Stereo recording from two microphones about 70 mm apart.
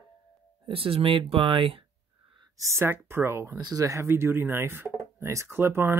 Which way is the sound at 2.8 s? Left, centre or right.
Right.